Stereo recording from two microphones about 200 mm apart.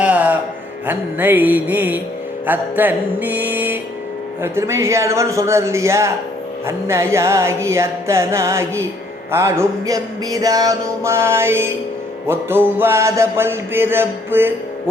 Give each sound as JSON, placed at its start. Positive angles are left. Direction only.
{"t": 0.0, "sound": "music", "side_deg": -5}